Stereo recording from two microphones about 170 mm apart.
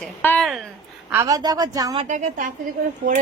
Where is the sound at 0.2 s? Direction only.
10° left (ahead or behind).